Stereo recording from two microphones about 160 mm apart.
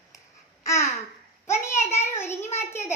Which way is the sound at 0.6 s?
20° left (ahead or behind).